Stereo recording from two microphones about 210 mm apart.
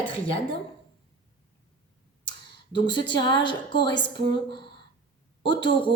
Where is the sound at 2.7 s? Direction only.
20° left (ahead or behind).